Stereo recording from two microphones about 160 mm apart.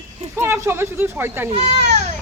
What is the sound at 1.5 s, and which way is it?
Speech, 45° right (ahead or behind).